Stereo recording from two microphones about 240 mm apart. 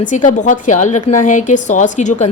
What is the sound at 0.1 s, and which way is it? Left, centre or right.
A woman's voice, left.